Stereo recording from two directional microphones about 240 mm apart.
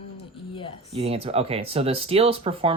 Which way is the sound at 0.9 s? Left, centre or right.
Right.